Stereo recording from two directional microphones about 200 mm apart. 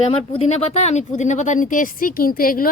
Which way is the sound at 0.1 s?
30° left (ahead or behind).